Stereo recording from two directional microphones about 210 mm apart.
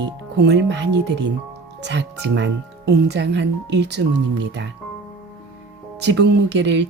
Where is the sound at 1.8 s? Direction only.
55° right (ahead or behind).